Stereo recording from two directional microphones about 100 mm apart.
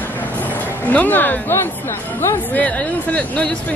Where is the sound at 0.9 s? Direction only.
20° left (ahead or behind).